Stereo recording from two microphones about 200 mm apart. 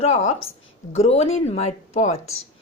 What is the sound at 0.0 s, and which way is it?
A woman's voice, 35° left (ahead or behind).